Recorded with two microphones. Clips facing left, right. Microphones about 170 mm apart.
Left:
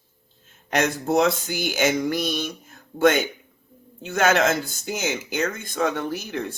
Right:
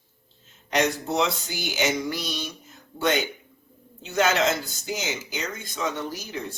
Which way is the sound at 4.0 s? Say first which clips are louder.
Left 3 dB; 50° left (ahead or behind).